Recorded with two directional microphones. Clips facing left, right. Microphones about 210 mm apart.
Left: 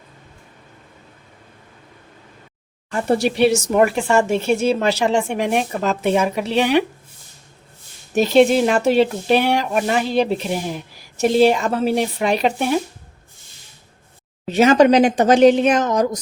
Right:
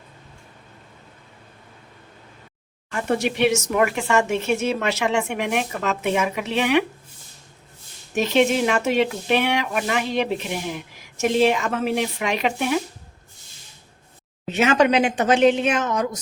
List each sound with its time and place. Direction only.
2.9 s speech: 35° left (ahead or behind)
8.1 s speech: 35° left (ahead or behind)
14.5 s speech: 35° left (ahead or behind)